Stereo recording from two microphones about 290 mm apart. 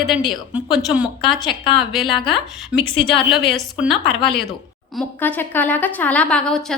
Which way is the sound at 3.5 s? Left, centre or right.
Centre.